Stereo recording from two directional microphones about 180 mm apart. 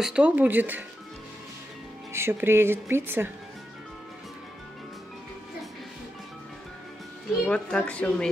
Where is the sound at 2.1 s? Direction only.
15° right (ahead or behind).